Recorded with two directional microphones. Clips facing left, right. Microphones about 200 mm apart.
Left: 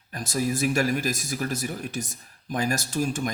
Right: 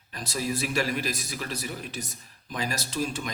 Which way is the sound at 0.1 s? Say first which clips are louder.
Left 4 dB; 50° left (ahead or behind).